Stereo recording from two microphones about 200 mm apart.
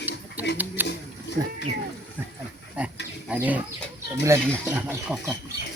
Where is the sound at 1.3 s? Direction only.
60° left (ahead or behind).